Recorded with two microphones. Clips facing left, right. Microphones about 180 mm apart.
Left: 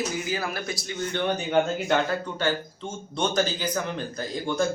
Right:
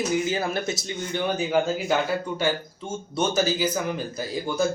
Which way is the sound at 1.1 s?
5° right (ahead or behind).